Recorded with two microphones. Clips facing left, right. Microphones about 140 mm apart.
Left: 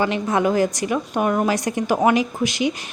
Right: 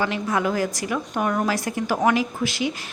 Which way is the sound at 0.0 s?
25° left (ahead or behind).